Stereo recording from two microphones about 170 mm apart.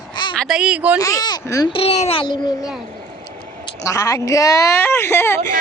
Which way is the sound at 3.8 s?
20° left (ahead or behind).